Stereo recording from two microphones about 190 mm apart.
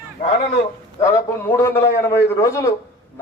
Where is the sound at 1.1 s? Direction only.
15° left (ahead or behind).